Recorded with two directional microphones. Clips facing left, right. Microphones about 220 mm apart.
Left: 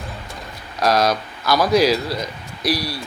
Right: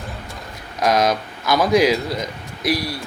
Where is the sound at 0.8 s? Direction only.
20° right (ahead or behind).